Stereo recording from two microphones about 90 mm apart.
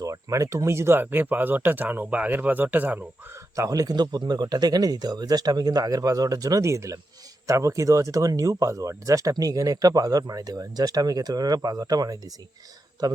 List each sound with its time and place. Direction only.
0.0 s speech: 40° right (ahead or behind); by 3.0 s 20° right (ahead or behind)
3.5 s speech: 40° right (ahead or behind)